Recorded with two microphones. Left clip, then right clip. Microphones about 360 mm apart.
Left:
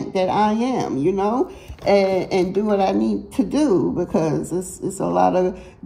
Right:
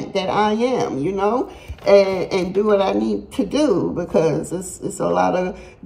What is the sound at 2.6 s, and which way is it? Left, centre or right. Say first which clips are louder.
A woman's voice: right 5 dB; centre.